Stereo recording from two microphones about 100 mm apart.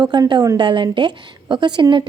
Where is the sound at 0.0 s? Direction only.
50° right (ahead or behind).